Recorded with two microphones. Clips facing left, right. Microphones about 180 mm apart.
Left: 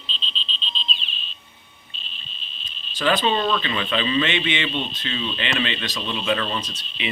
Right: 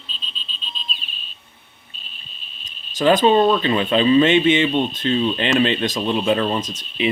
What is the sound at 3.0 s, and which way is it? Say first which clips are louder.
Speech: right 7 dB; 45° right (ahead or behind).